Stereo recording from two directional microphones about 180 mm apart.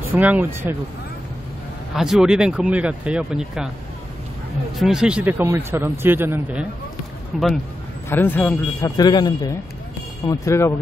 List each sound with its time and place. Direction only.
0.1 s speech: 10° right (ahead or behind)
2.0 s speech: centre (ahead or behind)
4.7 s speech: centre (ahead or behind)
8.1 s speech: 10° left (ahead or behind)
8.9 s speech: 25° left (ahead or behind)